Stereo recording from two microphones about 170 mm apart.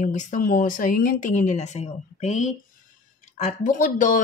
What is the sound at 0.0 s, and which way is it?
Speech, 45° left (ahead or behind).